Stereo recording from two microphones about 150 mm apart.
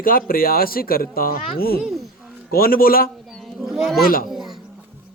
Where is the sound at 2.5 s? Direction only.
80° left.